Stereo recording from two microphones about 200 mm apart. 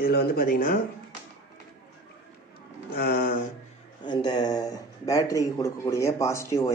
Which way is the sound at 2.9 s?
50° left (ahead or behind).